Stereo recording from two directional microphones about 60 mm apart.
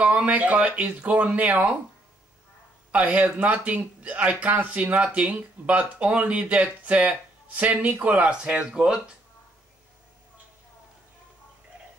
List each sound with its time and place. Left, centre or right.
0.0 s speech: right
2.9 s speech: right